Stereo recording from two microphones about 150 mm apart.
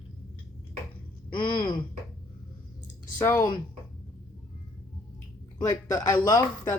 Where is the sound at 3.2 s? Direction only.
15° left (ahead or behind).